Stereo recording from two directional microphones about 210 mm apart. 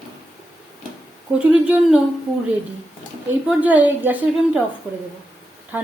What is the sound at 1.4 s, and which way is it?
Speech, 5° right (ahead or behind).